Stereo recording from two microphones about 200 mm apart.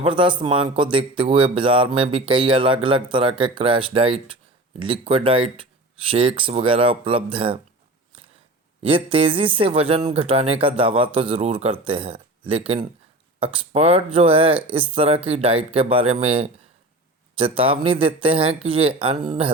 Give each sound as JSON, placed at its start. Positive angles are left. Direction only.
{"t": 0.0, "sound": "speech", "side_deg": -25}
{"t": 8.8, "sound": "speech", "side_deg": -25}